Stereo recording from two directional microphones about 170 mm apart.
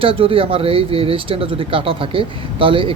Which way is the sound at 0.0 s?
35° right (ahead or behind).